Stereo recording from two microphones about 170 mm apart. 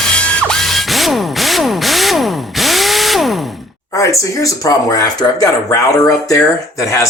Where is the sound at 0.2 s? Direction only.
5° left (ahead or behind).